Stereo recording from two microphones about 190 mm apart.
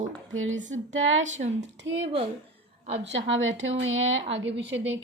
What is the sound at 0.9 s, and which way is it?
Speech, 90° right.